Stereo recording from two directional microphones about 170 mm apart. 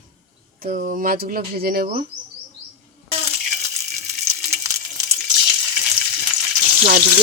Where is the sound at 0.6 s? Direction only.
55° right (ahead or behind).